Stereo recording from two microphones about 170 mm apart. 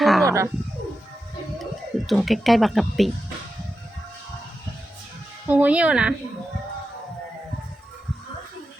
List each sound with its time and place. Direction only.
0.0 s bird: centre (ahead or behind)
0.3 s speech: 15° right (ahead or behind)
2.0 s speech: centre (ahead or behind)
5.5 s speech: 10° right (ahead or behind)